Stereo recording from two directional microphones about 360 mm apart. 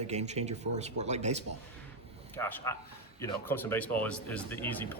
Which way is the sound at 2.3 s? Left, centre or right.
Centre.